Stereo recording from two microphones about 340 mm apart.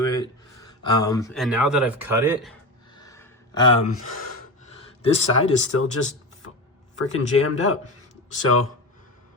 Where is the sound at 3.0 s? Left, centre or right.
Centre.